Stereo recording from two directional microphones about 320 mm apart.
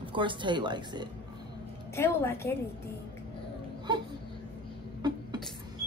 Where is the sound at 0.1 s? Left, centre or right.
Centre.